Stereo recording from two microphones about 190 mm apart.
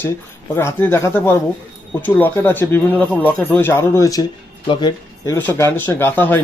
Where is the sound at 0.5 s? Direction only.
15° left (ahead or behind).